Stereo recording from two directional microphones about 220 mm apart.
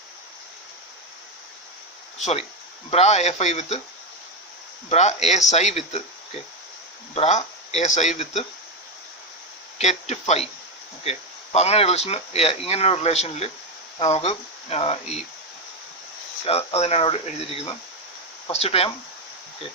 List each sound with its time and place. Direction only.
2.1 s speech: 30° left (ahead or behind)
4.9 s speech: 30° left (ahead or behind)
7.2 s speech: 30° left (ahead or behind)
9.7 s speech: 30° left (ahead or behind)
16.5 s speech: 30° left (ahead or behind)